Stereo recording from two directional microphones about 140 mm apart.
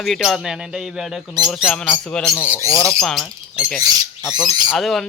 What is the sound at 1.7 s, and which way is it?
Speech, 5° left (ahead or behind).